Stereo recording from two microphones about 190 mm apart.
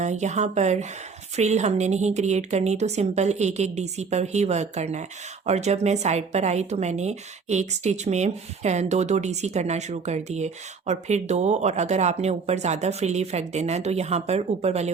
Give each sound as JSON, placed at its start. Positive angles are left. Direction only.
{"t": 0.0, "sound": "a woman's voice", "side_deg": -40}